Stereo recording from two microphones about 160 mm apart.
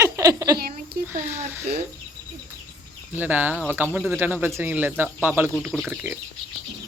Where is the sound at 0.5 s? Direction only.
75° right (ahead or behind).